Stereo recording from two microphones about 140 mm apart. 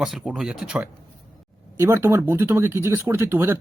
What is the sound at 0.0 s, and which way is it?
Speech, 5° right (ahead or behind).